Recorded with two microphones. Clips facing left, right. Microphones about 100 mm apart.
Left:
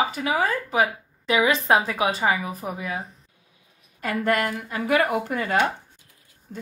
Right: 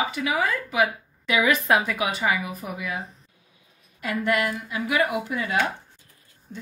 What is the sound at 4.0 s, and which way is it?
Speech, 40° left (ahead or behind).